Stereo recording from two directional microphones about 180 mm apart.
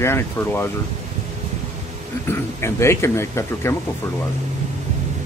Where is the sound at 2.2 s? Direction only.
15° left (ahead or behind).